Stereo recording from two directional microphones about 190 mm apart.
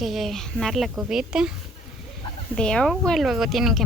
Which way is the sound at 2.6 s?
5° left (ahead or behind).